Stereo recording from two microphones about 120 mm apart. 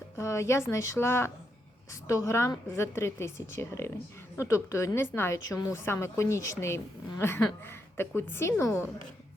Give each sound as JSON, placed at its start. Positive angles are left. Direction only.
{"t": 0.2, "sound": "a woman's voice", "side_deg": 25}